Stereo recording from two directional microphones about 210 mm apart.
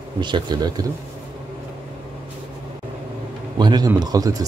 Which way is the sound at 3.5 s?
20° right (ahead or behind).